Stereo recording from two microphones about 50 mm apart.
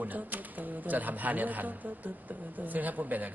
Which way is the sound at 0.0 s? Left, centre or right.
Right.